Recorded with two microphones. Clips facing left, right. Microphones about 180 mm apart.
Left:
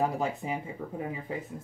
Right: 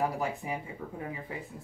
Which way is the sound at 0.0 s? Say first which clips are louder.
Left 2 dB; 25° left (ahead or behind).